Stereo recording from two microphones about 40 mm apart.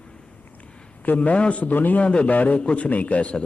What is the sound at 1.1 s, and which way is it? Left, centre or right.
Speech, left.